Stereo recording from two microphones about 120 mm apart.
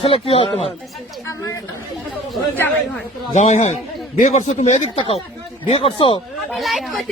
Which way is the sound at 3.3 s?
75° left (ahead or behind).